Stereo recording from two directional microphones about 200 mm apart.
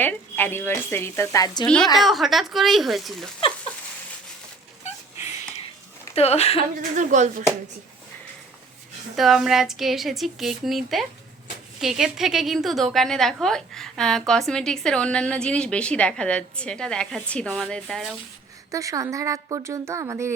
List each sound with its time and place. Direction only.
0.0 s speech: 10° left (ahead or behind)
1.6 s a woman's voice: 5° left (ahead or behind)
6.1 s speech: 30° left (ahead or behind)
6.9 s speech: 40° right (ahead or behind)
9.1 s a woman's voice: centre (ahead or behind)
18.7 s speech: 15° right (ahead or behind)